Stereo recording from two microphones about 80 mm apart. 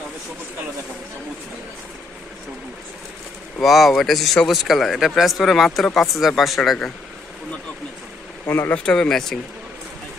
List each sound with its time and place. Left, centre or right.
3.6 s speech: centre
8.5 s speech: left
8.7 s speech: centre